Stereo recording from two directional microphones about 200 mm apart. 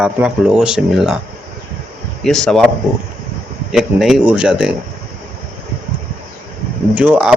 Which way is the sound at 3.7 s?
Centre (ahead or behind).